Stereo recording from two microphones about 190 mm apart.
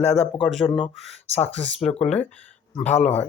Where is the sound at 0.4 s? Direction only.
Centre (ahead or behind).